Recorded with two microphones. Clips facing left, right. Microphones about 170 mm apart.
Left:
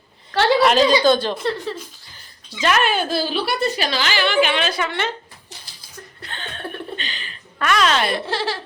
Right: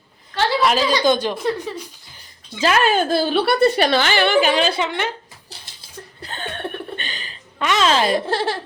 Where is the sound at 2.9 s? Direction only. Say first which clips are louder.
Right 4 dB; 45° right (ahead or behind).